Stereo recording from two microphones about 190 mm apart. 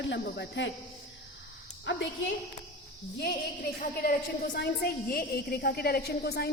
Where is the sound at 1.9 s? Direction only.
75° left (ahead or behind).